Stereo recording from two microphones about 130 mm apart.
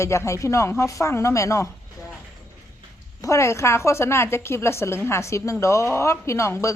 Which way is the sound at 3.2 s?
20° left (ahead or behind).